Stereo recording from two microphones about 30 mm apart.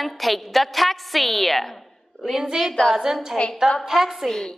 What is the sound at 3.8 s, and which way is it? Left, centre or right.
Speech, centre.